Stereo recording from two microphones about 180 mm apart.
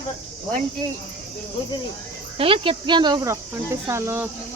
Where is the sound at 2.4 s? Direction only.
30° right (ahead or behind); by 4.2 s 15° right (ahead or behind).